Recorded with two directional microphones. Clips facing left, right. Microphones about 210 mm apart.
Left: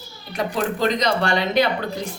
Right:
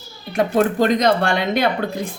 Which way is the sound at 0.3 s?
50° right (ahead or behind).